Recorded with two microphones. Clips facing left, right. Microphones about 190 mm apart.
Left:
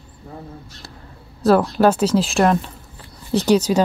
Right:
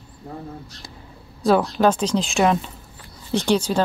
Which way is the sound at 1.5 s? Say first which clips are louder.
Left 3 dB; 5° left (ahead or behind).